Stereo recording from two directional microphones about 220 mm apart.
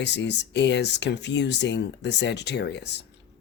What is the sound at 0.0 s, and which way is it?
Speech, 50° left (ahead or behind).